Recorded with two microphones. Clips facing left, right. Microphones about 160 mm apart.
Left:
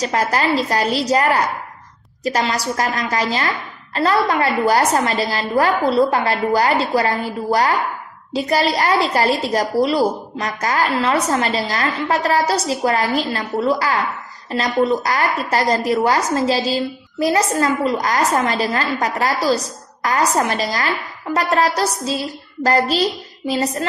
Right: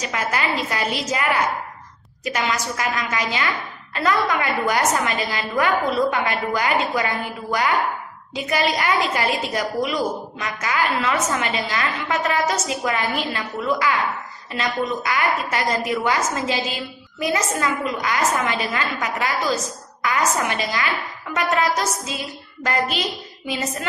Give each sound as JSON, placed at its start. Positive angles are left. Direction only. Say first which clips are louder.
{"t": 0.0, "sound": "a woman's voice", "louder": "left 6 dB", "side_deg": 35}